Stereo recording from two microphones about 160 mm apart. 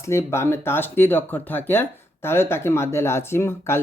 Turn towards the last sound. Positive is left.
turn(degrees=15)  # may be behind; listen again after turning